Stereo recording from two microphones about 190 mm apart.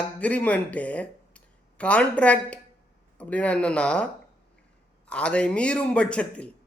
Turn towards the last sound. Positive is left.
turn(degrees=5)  # may be behind; listen again after turning